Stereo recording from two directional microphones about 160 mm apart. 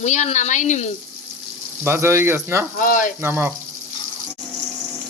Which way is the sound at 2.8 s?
60° left (ahead or behind).